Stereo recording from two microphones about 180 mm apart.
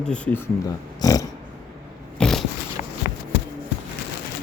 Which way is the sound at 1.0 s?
20° left (ahead or behind).